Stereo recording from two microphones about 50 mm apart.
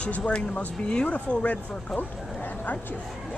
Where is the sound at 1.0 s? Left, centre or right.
Left.